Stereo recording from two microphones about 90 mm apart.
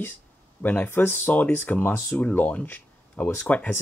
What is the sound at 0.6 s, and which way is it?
Speech, 20° left (ahead or behind).